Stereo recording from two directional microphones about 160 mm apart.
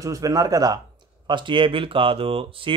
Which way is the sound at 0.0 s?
20° right (ahead or behind).